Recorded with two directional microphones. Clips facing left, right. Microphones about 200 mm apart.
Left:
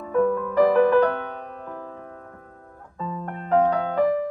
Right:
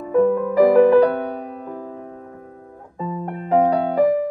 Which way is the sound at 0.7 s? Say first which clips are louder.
Right 6 dB; 35° right (ahead or behind).